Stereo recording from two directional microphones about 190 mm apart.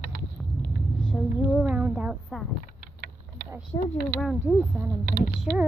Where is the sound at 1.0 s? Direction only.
Centre (ahead or behind).